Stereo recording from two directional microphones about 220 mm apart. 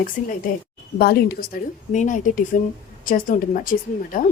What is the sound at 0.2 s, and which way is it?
A woman's voice, 40° left (ahead or behind).